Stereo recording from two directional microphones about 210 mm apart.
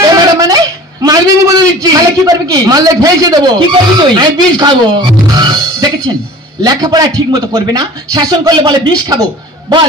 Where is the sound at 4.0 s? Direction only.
20° right (ahead or behind).